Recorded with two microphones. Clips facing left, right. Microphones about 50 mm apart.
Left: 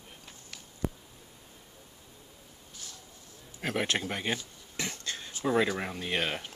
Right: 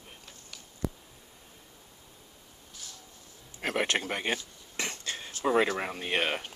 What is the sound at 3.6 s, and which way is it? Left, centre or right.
Speech, centre.